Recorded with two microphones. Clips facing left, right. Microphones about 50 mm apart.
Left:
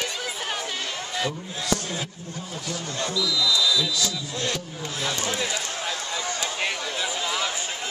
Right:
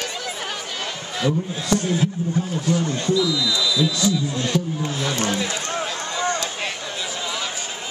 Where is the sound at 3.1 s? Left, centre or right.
Centre.